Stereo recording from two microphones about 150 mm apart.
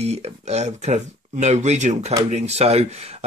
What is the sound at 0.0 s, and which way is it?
Speech, 45° right (ahead or behind).